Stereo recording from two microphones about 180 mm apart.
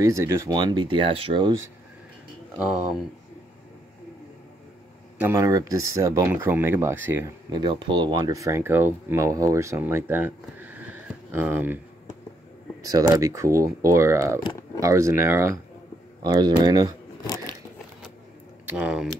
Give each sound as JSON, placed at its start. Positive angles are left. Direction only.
{"t": 0.0, "sound": "speech", "side_deg": -15}
{"t": 5.2, "sound": "speech", "side_deg": -15}
{"t": 7.5, "sound": "speech", "side_deg": -25}
{"t": 12.8, "sound": "speech", "side_deg": -20}
{"t": 18.7, "sound": "speech", "side_deg": -5}